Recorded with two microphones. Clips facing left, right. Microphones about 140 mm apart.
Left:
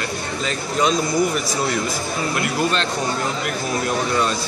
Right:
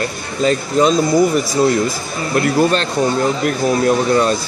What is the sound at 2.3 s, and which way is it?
Speech, 45° right (ahead or behind).